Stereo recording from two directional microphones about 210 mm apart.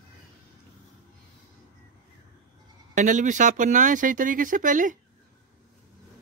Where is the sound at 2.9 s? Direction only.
35° right (ahead or behind).